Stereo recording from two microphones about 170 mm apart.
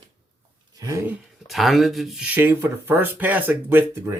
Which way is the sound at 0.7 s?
20° right (ahead or behind).